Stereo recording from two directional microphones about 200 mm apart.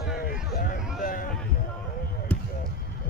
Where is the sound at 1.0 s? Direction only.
45° left (ahead or behind).